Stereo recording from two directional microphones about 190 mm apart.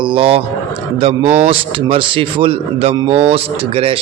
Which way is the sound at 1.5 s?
25° right (ahead or behind).